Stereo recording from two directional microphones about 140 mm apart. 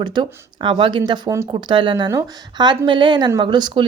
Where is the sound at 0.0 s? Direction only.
35° right (ahead or behind).